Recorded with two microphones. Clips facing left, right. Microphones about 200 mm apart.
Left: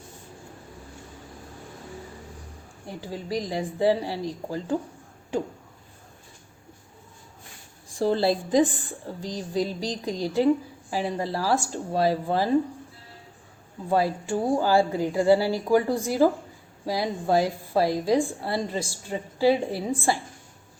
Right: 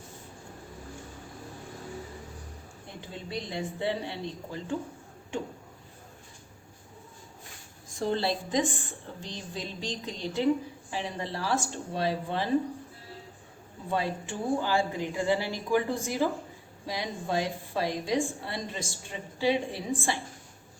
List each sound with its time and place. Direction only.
3.0 s a woman's voice: 35° left (ahead or behind)
7.9 s a woman's voice: 35° left (ahead or behind)
13.9 s a woman's voice: 35° left (ahead or behind)